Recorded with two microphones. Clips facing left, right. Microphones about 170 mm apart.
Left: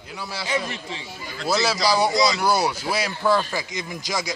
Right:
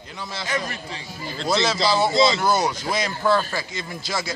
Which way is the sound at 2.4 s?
10° left (ahead or behind).